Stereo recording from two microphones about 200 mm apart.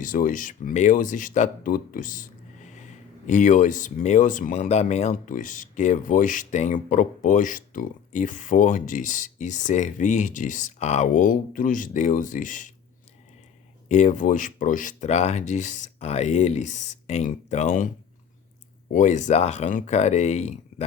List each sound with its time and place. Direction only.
0.0 s speech: 40° left (ahead or behind)
13.8 s speech: 35° left (ahead or behind)